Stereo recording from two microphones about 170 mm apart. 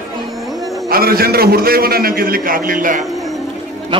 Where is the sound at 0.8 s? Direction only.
60° right (ahead or behind).